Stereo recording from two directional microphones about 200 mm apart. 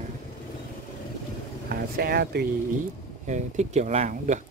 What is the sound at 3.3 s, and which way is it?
Speech, 35° right (ahead or behind).